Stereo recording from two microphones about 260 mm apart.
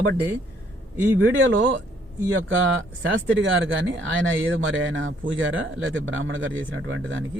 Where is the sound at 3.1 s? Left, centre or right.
Right.